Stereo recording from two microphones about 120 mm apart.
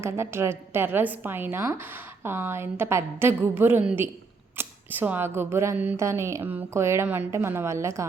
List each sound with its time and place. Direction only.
0.0 s a woman's voice: 20° right (ahead or behind)